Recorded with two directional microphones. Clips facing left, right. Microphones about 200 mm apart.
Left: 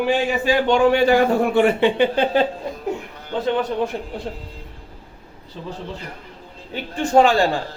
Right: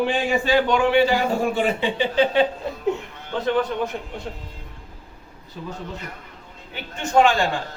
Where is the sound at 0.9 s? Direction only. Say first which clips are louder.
Left 3 dB; 50° left (ahead or behind).